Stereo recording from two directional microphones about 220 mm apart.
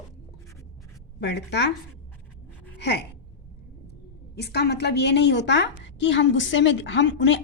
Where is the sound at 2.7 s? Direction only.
50° left (ahead or behind).